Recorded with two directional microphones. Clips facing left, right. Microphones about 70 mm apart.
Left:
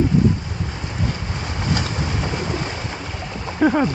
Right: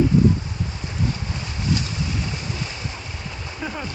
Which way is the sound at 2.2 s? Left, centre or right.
Left.